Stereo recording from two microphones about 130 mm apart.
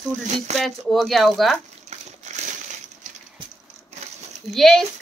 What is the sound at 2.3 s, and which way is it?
Crushing, 65° right (ahead or behind).